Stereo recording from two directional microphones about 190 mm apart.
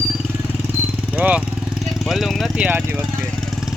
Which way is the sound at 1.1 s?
10° right (ahead or behind).